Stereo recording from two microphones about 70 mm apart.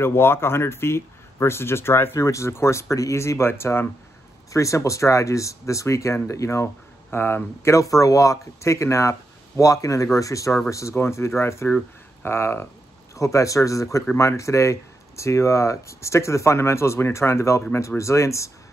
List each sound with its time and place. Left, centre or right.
0.0 s speech: left
4.5 s speech: left
7.7 s speech: left
13.1 s speech: left